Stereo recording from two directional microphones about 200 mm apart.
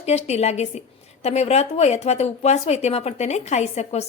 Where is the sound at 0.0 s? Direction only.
35° left (ahead or behind).